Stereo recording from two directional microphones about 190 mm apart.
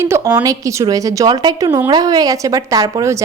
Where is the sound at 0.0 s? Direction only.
15° right (ahead or behind).